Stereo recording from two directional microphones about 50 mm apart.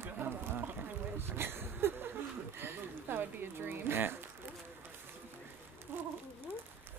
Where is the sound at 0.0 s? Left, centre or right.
Right.